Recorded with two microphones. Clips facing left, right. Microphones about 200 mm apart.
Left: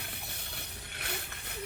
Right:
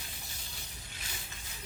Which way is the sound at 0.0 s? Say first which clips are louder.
Left 4 dB; 60° left (ahead or behind).